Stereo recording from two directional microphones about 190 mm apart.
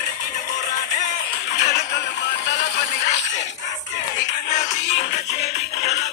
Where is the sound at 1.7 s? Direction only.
60° left (ahead or behind).